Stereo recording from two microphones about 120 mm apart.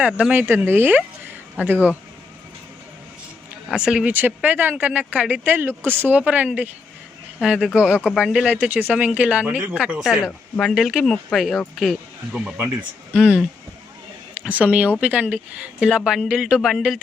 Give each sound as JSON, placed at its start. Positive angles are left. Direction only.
{"t": 0.1, "sound": "speech", "side_deg": -10}
{"t": 3.7, "sound": "speech", "side_deg": -5}
{"t": 14.4, "sound": "speech", "side_deg": -10}